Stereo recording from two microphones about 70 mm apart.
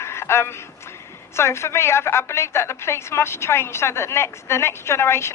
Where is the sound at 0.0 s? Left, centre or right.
Left.